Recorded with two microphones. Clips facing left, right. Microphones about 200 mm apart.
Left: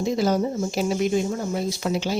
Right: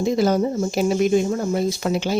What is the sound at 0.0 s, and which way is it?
Speech, 55° right (ahead or behind).